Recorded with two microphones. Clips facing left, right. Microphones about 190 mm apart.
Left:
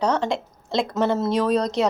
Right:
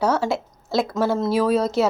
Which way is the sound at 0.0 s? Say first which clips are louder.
Right 1 dB; 5° right (ahead or behind).